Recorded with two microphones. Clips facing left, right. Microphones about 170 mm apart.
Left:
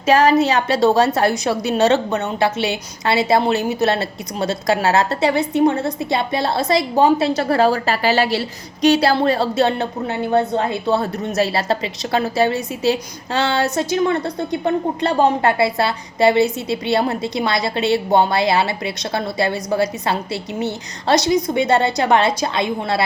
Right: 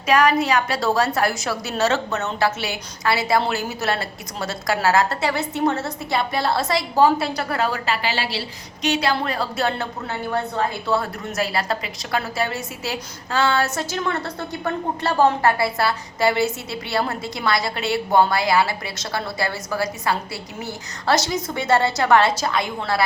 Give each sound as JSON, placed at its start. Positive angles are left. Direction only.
{"t": 0.0, "sound": "a woman's voice", "side_deg": 25}